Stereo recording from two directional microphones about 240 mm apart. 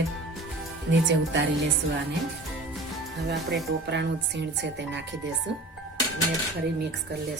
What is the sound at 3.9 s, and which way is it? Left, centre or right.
A woman's voice, right.